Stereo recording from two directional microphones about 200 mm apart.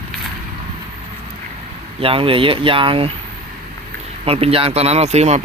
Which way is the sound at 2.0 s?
25° right (ahead or behind).